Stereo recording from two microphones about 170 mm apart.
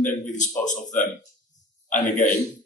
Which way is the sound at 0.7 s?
45° left (ahead or behind).